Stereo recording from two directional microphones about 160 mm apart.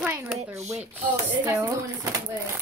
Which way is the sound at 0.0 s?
10° right (ahead or behind).